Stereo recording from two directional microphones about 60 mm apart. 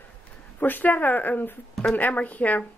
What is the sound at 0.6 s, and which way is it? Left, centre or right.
Speech, left.